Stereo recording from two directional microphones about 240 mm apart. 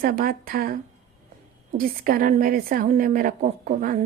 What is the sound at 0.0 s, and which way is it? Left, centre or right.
A woman's voice, right.